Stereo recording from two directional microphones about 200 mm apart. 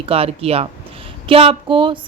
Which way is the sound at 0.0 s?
30° right (ahead or behind).